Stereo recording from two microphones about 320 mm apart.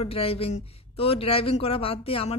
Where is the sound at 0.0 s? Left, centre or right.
Centre.